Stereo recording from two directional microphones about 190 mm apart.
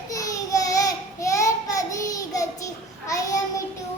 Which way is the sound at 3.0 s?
15° left (ahead or behind).